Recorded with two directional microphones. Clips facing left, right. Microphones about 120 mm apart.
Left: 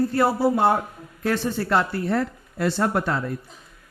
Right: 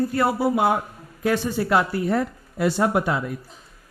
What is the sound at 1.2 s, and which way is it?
A man's voice, 5° right (ahead or behind).